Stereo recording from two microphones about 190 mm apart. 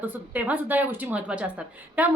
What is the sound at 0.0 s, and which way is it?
A woman's voice, 10° right (ahead or behind).